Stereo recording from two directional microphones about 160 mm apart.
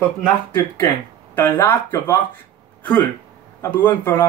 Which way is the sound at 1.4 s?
15° left (ahead or behind).